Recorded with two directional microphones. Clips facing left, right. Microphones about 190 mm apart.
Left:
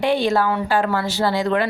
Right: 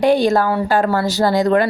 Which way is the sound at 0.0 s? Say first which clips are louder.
Right 4 dB; 40° right (ahead or behind).